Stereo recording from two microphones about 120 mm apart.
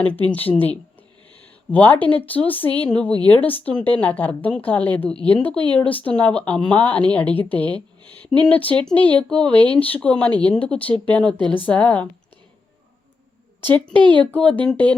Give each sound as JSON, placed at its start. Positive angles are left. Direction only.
{"t": 0.3, "sound": "a woman's voice", "side_deg": 15}
{"t": 1.7, "sound": "a woman's voice", "side_deg": 15}
{"t": 11.3, "sound": "a woman's voice", "side_deg": -40}
{"t": 11.6, "sound": "a woman's voice", "side_deg": 10}
{"t": 13.6, "sound": "a woman's voice", "side_deg": 15}
{"t": 14.0, "sound": "speech", "side_deg": -45}
{"t": 14.3, "sound": "a woman's voice", "side_deg": 10}